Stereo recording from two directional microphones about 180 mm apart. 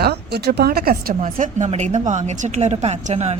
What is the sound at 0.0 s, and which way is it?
A woman's voice, 65° right (ahead or behind).